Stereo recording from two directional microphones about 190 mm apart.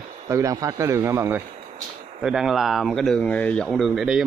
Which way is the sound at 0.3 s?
15° right (ahead or behind).